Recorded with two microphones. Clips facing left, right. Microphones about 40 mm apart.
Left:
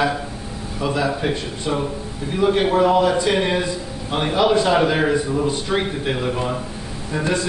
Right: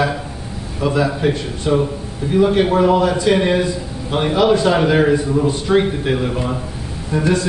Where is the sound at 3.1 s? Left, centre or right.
Centre.